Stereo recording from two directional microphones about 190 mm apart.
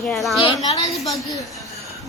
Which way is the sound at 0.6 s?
25° left (ahead or behind).